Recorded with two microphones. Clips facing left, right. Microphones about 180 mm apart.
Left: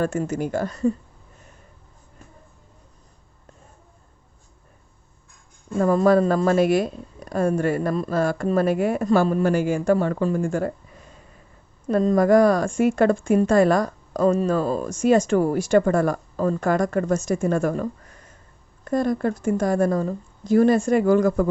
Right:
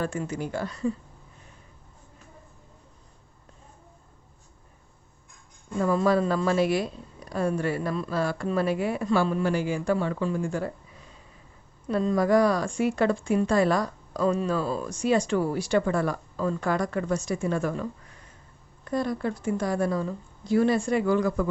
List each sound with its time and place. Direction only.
0.0 s speech: 45° left (ahead or behind)
5.7 s speech: 45° left (ahead or behind)